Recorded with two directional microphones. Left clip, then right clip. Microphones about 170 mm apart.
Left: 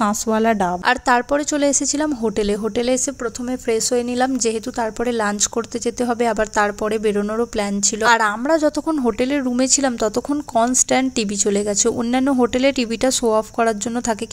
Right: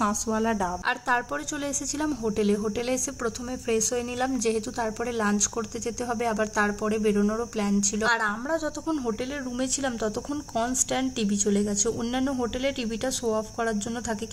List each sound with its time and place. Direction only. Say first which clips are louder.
0.0 s a woman's voice: left 8 dB; 35° left (ahead or behind)